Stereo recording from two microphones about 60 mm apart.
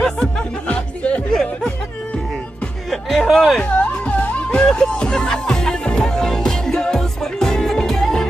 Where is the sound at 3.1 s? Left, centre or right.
Centre.